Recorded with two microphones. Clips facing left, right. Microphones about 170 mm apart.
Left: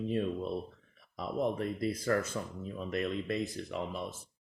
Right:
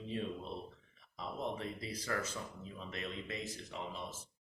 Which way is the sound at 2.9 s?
65° left (ahead or behind).